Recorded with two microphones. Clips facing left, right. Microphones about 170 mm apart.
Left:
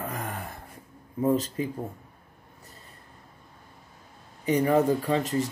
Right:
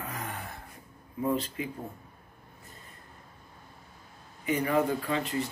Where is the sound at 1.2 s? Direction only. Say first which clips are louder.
Left 5 dB; 40° left (ahead or behind).